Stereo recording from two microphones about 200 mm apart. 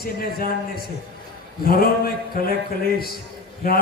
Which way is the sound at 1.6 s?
45° left (ahead or behind).